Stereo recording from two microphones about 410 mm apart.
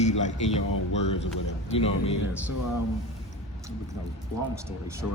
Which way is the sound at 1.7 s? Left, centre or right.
Centre.